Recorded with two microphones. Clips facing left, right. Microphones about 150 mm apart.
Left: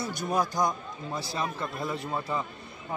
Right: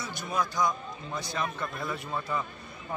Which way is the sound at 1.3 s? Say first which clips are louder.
Even; 25° left (ahead or behind).